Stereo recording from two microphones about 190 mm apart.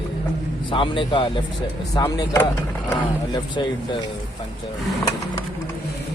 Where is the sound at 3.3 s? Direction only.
25° left (ahead or behind).